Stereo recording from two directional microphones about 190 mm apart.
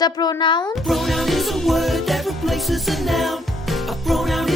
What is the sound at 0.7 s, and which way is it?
Music, centre (ahead or behind).